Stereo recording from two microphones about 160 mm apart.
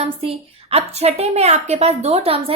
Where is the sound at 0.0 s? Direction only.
40° right (ahead or behind).